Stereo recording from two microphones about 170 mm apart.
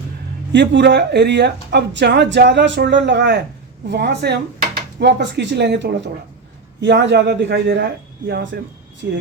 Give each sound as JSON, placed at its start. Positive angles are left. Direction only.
{"t": 0.5, "sound": "speech", "side_deg": -90}
{"t": 8.5, "sound": "speech", "side_deg": -70}